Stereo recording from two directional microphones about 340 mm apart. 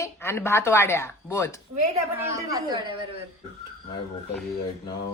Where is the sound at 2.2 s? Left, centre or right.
Centre.